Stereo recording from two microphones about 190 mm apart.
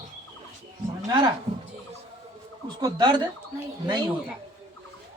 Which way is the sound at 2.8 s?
20° right (ahead or behind).